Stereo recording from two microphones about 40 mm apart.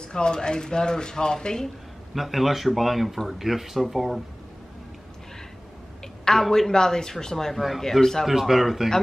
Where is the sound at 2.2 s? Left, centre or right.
Centre.